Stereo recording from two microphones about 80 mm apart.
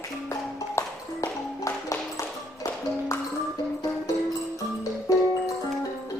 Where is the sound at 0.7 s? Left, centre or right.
Left.